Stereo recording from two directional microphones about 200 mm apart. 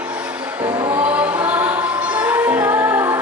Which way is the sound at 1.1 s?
10° right (ahead or behind).